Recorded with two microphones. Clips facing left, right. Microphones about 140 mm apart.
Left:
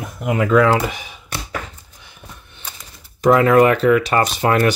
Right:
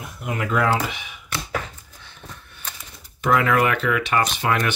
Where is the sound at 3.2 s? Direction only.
35° left (ahead or behind).